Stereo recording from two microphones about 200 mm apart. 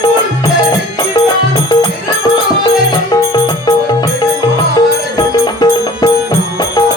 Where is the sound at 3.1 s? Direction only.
20° left (ahead or behind).